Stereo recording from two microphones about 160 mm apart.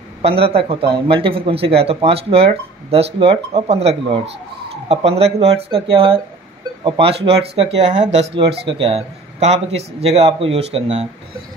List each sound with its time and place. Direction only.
0.2 s a man's voice: 35° right (ahead or behind)